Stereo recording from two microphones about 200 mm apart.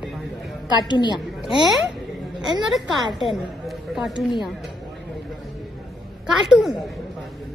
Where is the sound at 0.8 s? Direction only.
20° left (ahead or behind).